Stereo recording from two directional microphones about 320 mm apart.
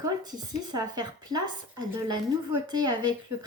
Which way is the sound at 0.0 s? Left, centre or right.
Centre.